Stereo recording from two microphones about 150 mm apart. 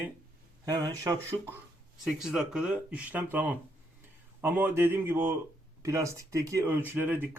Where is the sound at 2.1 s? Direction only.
Centre (ahead or behind).